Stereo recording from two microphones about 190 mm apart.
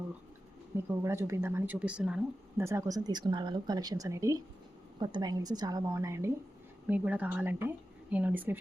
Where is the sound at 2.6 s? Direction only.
15° right (ahead or behind).